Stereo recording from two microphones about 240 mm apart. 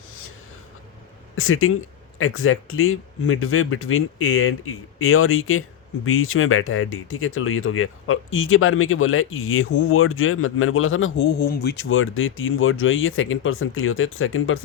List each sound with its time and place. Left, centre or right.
1.4 s speech: left